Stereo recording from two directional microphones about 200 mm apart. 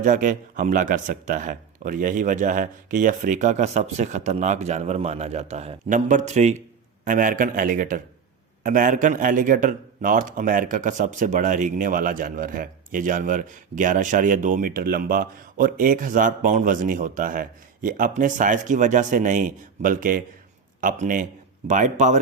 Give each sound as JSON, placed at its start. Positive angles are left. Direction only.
{"t": 0.0, "sound": "a man's voice", "side_deg": -40}